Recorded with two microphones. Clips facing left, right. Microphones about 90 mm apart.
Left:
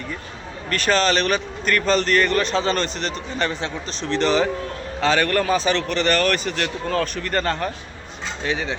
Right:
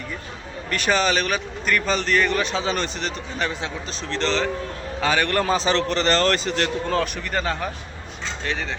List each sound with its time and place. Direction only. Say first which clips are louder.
0.7 s a man's voice: left 2 dB; 15° right (ahead or behind)
4.2 s a man's voice: left 4 dB; 10° left (ahead or behind)
4.9 s a man's voice: left 2 dB; 10° right (ahead or behind)
5.3 s a man's voice: left 1 dB; 25° right (ahead or behind)
7.2 s a man's voice: left 3 dB; 5° right (ahead or behind)
8.4 s speech: left 4 dB; 5° left (ahead or behind)